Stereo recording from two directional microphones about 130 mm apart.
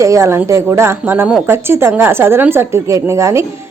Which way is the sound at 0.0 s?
25° right (ahead or behind).